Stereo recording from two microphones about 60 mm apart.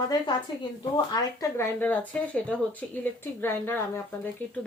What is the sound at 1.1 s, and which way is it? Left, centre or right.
Speech, left.